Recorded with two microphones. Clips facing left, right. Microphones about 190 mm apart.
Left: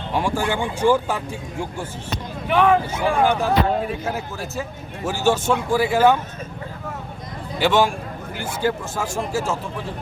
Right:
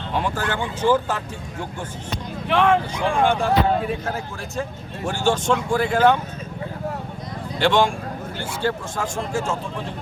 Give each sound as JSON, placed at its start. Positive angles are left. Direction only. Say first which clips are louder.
{"t": 0.1, "sound": "speech", "louder": "left 3 dB", "side_deg": 10}
{"t": 2.5, "sound": "speech", "louder": "left 1 dB", "side_deg": 5}
{"t": 7.6, "sound": "speech", "louder": "even", "side_deg": 5}